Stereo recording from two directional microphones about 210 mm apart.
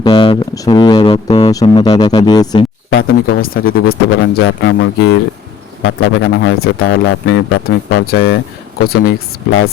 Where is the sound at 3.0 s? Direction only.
45° left (ahead or behind).